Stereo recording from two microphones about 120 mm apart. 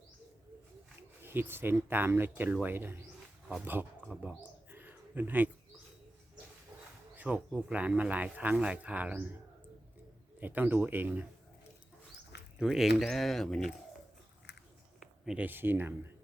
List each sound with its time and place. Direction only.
1.2 s speech: 20° right (ahead or behind)
4.0 s bird: 5° right (ahead or behind)
7.2 s speech: 10° right (ahead or behind)
10.4 s speech: 15° right (ahead or behind)
12.7 s speech: centre (ahead or behind)
15.0 s a sound: 5° right (ahead or behind)
15.4 s speech: 15° right (ahead or behind)